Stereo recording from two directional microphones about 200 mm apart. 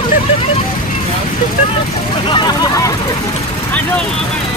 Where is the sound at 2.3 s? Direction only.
15° left (ahead or behind).